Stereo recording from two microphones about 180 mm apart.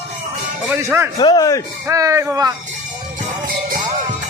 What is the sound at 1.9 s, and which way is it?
Speech, 20° right (ahead or behind).